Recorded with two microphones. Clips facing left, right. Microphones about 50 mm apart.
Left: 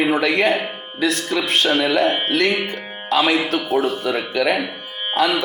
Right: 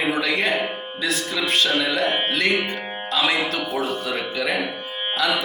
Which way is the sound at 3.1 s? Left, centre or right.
Left.